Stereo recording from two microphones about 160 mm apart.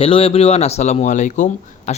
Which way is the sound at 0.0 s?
35° left (ahead or behind).